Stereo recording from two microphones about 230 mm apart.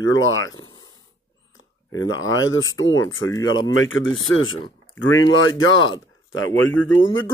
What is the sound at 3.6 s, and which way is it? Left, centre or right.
Speech, left.